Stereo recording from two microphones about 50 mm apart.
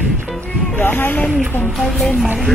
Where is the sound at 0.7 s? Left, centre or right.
Left.